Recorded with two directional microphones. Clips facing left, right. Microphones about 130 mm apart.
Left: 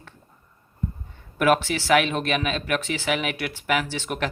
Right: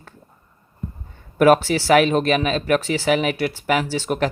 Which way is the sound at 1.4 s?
40° right (ahead or behind).